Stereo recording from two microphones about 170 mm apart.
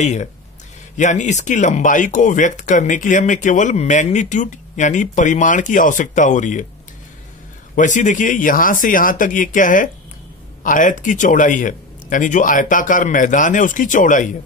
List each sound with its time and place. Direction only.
0.0 s speech: 40° left (ahead or behind)
7.7 s speech: 45° left (ahead or behind)